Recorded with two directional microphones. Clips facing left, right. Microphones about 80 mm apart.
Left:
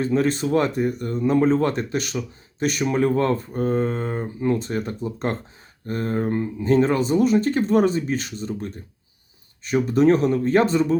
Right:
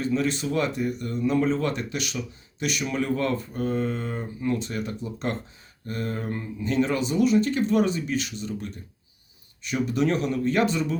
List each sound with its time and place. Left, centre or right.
0.0 s speech: left